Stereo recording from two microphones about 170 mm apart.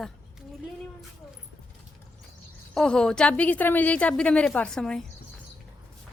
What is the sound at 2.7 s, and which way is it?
A woman's voice, 5° left (ahead or behind).